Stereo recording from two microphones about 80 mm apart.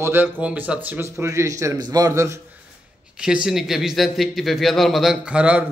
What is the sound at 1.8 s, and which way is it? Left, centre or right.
Speech, right.